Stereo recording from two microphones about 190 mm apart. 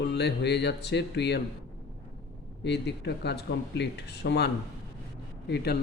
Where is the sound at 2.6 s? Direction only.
65° left (ahead or behind).